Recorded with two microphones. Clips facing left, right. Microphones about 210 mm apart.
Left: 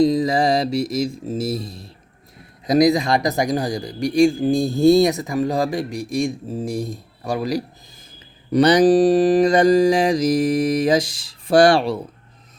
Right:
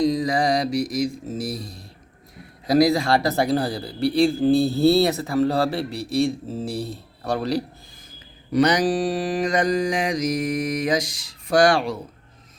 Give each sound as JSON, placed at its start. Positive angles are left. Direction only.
{"t": 0.0, "sound": "music", "side_deg": 25}
{"t": 2.6, "sound": "speech", "side_deg": 20}
{"t": 8.5, "sound": "mantra", "side_deg": 35}